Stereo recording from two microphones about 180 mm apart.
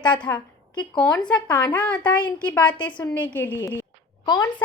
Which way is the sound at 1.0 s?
5° left (ahead or behind).